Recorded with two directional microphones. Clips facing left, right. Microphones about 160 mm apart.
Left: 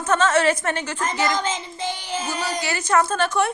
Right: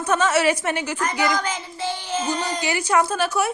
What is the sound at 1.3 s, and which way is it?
Child singing, 25° left (ahead or behind).